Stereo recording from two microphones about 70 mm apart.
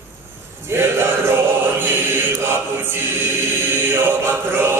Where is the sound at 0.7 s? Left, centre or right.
Right.